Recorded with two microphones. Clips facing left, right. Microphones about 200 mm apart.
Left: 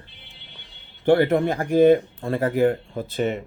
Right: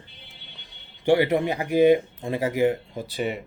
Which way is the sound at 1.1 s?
10° right (ahead or behind).